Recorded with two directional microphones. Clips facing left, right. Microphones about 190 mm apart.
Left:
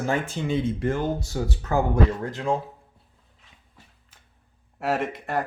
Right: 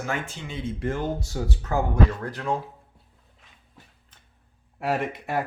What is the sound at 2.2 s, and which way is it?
Speech, 25° left (ahead or behind).